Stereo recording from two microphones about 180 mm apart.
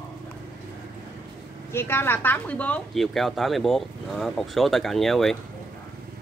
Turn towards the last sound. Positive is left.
turn(degrees=0)  # may be behind; listen again after turning